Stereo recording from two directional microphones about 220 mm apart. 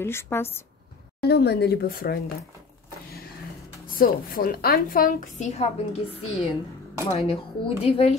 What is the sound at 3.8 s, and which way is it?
A woman's voice, 40° left (ahead or behind).